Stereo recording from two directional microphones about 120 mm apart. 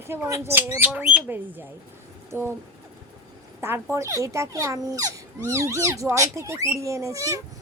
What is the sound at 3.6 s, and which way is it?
Speech, 20° right (ahead or behind).